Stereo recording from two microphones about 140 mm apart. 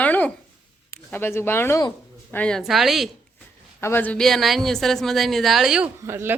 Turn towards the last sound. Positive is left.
turn(degrees=-15)  # may be behind; listen again after turning